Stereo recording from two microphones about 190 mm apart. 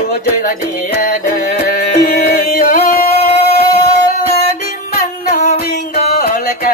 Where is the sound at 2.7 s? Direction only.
40° left (ahead or behind).